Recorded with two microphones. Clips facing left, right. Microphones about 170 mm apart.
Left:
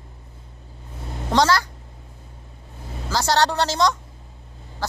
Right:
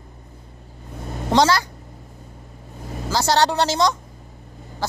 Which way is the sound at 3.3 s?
20° right (ahead or behind).